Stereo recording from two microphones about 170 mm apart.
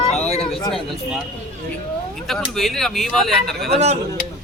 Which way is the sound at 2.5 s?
Centre (ahead or behind).